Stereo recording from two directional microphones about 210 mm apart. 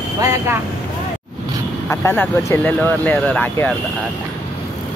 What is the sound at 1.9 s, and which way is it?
Speech, 10° left (ahead or behind).